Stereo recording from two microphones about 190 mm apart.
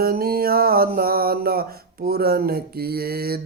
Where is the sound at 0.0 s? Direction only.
55° right (ahead or behind).